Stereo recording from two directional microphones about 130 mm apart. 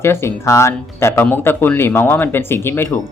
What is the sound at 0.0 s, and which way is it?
Speech, 20° left (ahead or behind).